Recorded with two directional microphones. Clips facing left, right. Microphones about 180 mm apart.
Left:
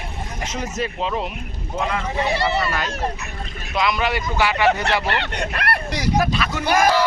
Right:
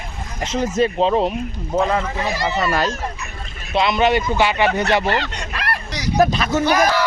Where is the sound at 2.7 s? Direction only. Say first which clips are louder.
Right 6 dB; 35° right (ahead or behind).